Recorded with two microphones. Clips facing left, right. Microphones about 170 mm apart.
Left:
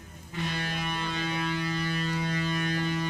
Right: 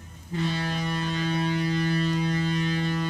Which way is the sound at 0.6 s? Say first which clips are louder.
Right 4 dB; 35° right (ahead or behind).